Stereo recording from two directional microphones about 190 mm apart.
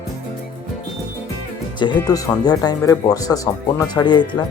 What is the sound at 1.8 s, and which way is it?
Speech, 25° left (ahead or behind).